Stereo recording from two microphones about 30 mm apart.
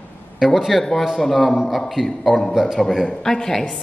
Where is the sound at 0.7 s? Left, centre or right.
Centre.